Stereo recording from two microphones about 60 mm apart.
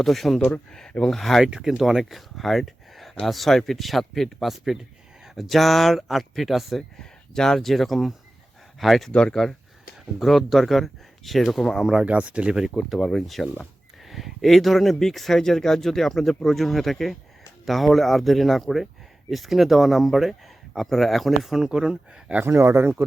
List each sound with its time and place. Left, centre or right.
0.0 s speech: centre
1.5 s speech: centre
7.0 s speech: centre
12.0 s speech: right
22.4 s speech: right